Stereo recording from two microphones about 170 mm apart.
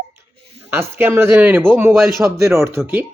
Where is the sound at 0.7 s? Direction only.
15° right (ahead or behind).